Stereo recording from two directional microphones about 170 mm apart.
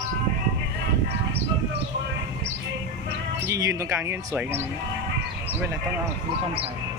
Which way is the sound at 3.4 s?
20° right (ahead or behind).